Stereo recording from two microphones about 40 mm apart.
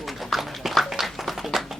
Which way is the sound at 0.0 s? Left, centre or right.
Centre.